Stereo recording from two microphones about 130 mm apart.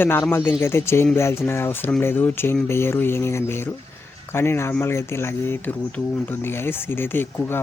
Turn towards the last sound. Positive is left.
turn(degrees=15)  # may be behind; listen again after turning